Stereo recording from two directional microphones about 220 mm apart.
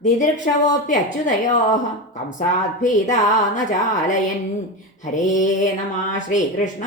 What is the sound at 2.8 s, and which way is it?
Speech, 35° left (ahead or behind).